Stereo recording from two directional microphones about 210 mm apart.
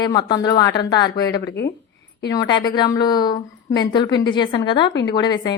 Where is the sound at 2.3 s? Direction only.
20° left (ahead or behind).